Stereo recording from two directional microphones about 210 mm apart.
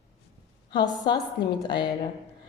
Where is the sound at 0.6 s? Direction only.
20° left (ahead or behind).